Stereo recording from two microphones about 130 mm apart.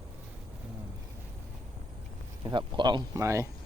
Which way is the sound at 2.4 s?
35° right (ahead or behind).